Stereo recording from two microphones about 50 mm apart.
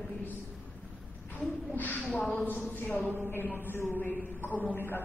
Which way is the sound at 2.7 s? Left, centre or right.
Left.